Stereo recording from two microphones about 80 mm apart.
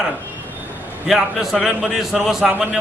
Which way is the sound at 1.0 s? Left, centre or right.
Centre.